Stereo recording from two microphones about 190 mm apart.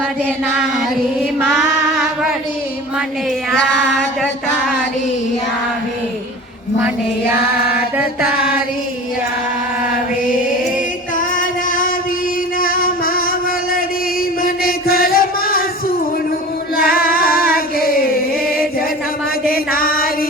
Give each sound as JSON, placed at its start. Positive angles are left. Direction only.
{"t": 1.4, "sound": "music", "side_deg": -5}
{"t": 3.5, "sound": "a sound", "side_deg": 0}
{"t": 7.8, "sound": "chant", "side_deg": -10}
{"t": 11.2, "sound": "music", "side_deg": 45}
{"t": 14.4, "sound": "chant", "side_deg": 50}
{"t": 16.7, "sound": "singing", "side_deg": 50}
{"t": 19.5, "sound": "mantra", "side_deg": 50}